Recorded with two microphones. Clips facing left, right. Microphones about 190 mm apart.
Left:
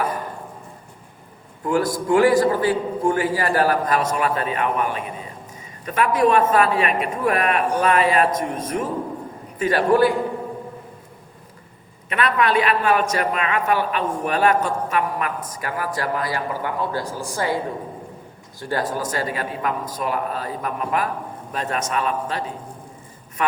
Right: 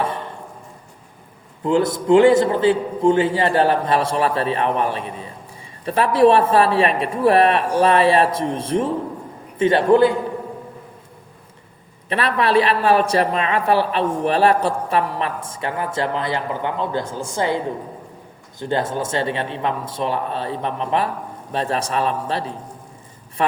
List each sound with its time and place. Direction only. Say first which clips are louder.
0.0 s a sound: right 1 dB; 25° right (ahead or behind)
1.6 s a man's voice: right 3 dB; 25° right (ahead or behind)
12.0 s a man's voice: right 1 dB; 30° right (ahead or behind)
18.6 s a man's voice: right 2 dB; 25° right (ahead or behind)